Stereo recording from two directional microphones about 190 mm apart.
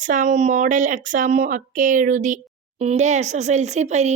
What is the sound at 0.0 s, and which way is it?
Speech, 40° right (ahead or behind).